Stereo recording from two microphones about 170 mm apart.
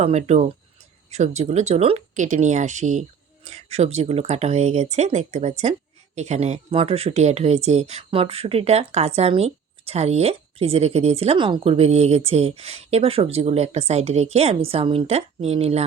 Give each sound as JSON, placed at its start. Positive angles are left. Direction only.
{"t": 0.0, "sound": "speech", "side_deg": -40}